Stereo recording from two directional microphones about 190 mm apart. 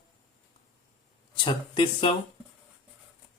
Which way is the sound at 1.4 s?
25° left (ahead or behind).